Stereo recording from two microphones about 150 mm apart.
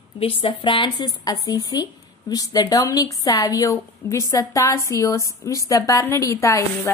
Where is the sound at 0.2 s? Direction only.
35° left (ahead or behind).